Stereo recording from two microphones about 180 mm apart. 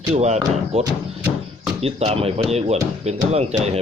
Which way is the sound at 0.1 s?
35° right (ahead or behind).